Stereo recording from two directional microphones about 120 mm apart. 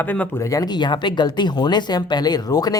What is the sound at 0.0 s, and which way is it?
Speech, 15° left (ahead or behind).